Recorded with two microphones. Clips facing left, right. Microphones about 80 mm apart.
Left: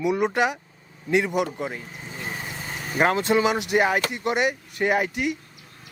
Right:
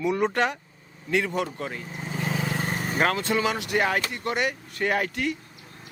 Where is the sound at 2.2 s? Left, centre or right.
Right.